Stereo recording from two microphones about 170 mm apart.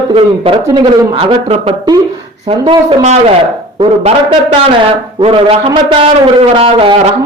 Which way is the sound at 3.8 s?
30° right (ahead or behind).